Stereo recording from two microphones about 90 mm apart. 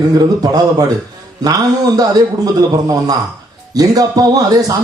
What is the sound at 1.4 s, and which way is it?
Speech, 45° right (ahead or behind).